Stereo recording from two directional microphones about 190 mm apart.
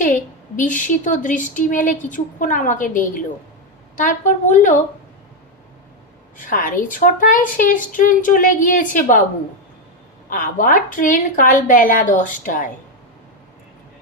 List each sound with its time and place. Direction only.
0.0 s a woman's voice: 45° left (ahead or behind)
6.3 s speech: 45° left (ahead or behind)
10.2 s speech: 45° left (ahead or behind)